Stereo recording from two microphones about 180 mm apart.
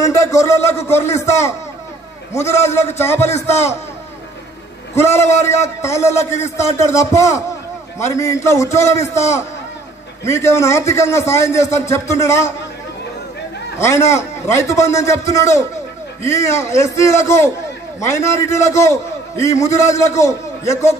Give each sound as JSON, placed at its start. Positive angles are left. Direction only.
{"t": 0.0, "sound": "a man's voice", "side_deg": 15}
{"t": 4.9, "sound": "a man's voice", "side_deg": 15}
{"t": 10.2, "sound": "a man's voice", "side_deg": 15}
{"t": 13.7, "sound": "a man's voice", "side_deg": 15}